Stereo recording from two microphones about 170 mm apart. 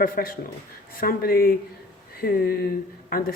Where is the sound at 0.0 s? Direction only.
60° left (ahead or behind).